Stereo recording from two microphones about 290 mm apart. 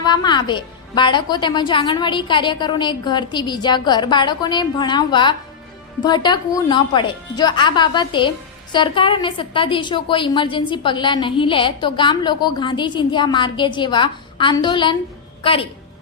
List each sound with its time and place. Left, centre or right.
0.0 s a woman's voice: centre